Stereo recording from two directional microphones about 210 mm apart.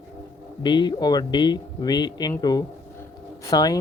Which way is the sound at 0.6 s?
20° left (ahead or behind).